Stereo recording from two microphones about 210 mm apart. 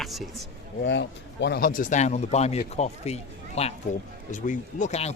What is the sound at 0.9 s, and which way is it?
A man's voice, 55° left (ahead or behind).